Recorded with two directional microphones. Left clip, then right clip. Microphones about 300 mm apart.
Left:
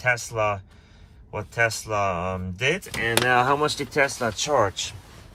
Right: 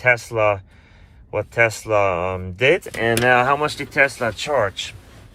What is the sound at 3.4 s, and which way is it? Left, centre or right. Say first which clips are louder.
Speech: right 3 dB; centre.